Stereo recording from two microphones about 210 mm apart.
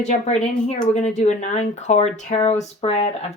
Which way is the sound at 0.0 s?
35° left (ahead or behind).